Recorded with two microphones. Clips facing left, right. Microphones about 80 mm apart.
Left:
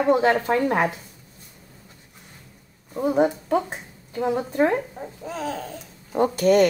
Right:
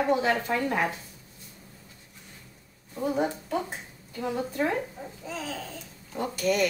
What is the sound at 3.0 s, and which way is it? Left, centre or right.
Speech, left.